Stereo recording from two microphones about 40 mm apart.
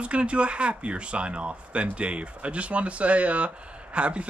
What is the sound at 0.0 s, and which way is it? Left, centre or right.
Speech, right.